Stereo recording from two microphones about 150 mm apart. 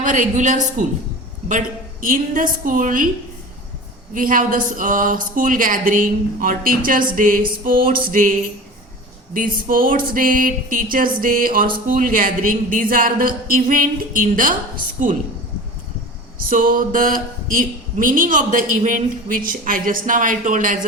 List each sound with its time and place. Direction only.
0.0 s speech: 60° right (ahead or behind)
4.1 s a woman's voice: 65° right (ahead or behind)
16.5 s speech: 65° right (ahead or behind)